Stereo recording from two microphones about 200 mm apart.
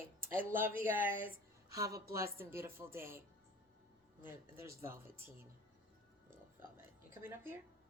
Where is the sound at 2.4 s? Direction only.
10° right (ahead or behind).